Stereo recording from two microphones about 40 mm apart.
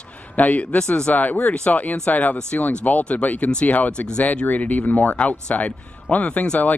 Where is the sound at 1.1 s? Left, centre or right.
Left.